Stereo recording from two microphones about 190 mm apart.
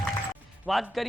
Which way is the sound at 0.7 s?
Centre (ahead or behind).